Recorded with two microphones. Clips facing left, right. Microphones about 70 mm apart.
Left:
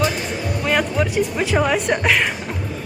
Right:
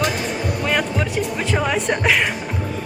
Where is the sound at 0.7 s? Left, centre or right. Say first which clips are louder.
Left 4 dB; centre.